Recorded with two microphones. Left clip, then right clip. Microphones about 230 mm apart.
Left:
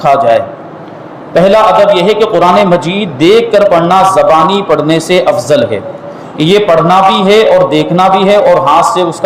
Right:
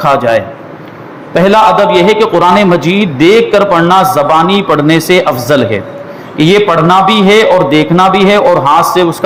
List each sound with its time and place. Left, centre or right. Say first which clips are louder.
0.0 s a man's voice: left 2 dB; right